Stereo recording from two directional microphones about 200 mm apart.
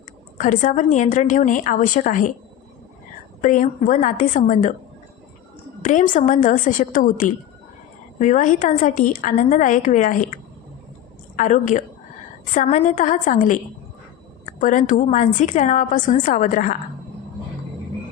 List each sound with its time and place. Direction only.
0.3 s a woman's voice: 40° left (ahead or behind)
3.4 s a woman's voice: 40° left (ahead or behind)
5.8 s a woman's voice: 40° left (ahead or behind)
11.3 s a woman's voice: 40° left (ahead or behind)